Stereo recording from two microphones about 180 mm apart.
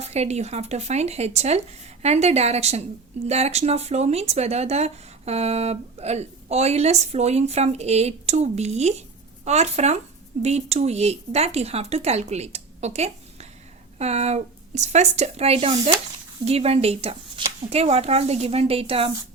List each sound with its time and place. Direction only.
0.0 s speech: 35° right (ahead or behind)